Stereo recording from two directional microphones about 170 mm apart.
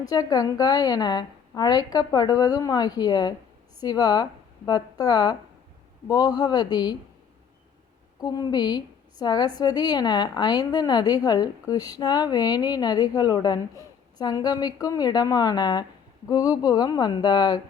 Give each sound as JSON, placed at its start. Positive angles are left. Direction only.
{"t": 0.0, "sound": "a woman's voice", "side_deg": 20}
{"t": 8.2, "sound": "a woman's voice", "side_deg": 25}